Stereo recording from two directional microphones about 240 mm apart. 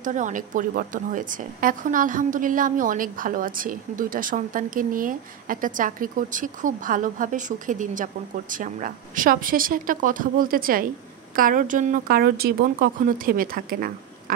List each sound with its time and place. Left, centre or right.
0.0 s a woman's voice: right